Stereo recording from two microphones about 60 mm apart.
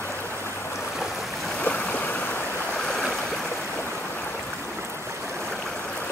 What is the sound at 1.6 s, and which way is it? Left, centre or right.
Stream, left.